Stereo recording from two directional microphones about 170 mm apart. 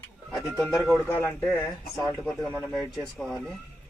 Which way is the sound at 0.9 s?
10° left (ahead or behind).